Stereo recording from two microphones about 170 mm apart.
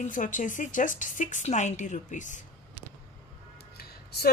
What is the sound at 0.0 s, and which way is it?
Speech, 50° left (ahead or behind).